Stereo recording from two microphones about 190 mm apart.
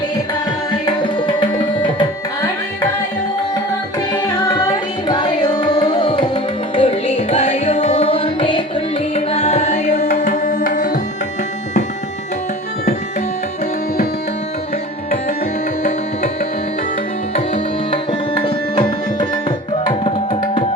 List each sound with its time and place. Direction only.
1.0 s tabla: 25° left (ahead or behind)
4.1 s carnatic music: 20° left (ahead or behind)
9.1 s music: 35° left (ahead or behind)
10.1 s tabla: 40° left (ahead or behind)
17.3 s tabla: 35° left (ahead or behind)
18.1 s tabla: 25° left (ahead or behind)